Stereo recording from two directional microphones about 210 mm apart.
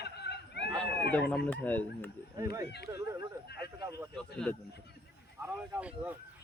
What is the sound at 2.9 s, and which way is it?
Speech, 15° right (ahead or behind).